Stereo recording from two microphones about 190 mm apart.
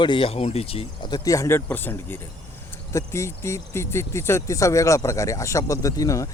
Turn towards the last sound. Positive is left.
turn(degrees=15)  # may be behind; listen again after turning